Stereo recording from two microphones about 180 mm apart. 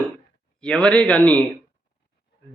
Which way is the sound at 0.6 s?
5° left (ahead or behind).